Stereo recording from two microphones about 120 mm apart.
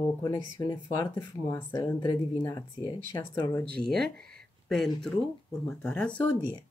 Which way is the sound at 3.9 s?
5° left (ahead or behind).